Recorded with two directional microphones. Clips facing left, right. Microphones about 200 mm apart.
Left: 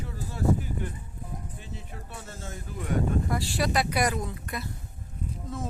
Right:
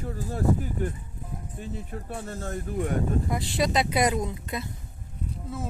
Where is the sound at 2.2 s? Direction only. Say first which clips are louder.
Right 8 dB; 55° right (ahead or behind).